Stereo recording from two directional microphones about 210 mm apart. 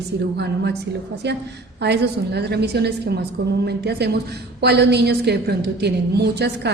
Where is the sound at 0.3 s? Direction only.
55° right (ahead or behind).